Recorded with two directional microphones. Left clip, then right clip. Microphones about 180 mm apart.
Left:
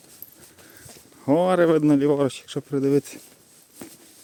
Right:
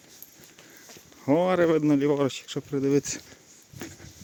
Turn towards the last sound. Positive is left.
turn(degrees=20)  # may be behind; listen again after turning